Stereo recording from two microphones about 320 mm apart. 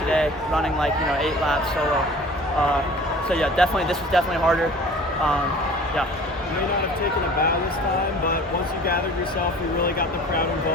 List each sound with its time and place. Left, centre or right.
0.1 s speech: centre
3.2 s speech: centre
9.8 s speech: left